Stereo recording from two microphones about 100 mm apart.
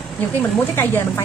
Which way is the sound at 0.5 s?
20° left (ahead or behind).